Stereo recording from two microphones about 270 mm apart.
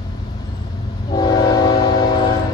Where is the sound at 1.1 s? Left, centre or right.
Centre.